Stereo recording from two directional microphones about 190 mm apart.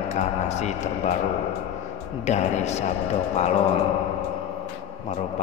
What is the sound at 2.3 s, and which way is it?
Speech, 35° left (ahead or behind).